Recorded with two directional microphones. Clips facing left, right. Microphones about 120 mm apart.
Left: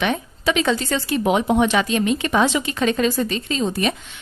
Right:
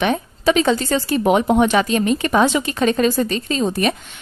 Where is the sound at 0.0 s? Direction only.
40° right (ahead or behind).